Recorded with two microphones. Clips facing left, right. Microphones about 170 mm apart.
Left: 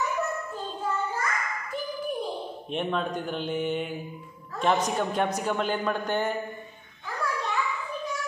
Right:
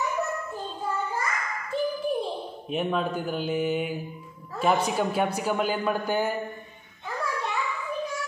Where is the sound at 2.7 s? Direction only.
5° right (ahead or behind).